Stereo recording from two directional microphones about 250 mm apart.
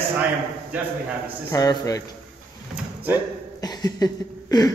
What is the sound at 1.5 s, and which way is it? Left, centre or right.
Speech, centre.